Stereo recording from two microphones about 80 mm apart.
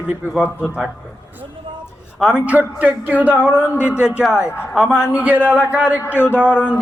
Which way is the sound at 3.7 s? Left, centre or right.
Left.